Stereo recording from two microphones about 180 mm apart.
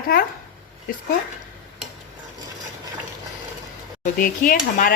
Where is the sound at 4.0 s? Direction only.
50° left (ahead or behind).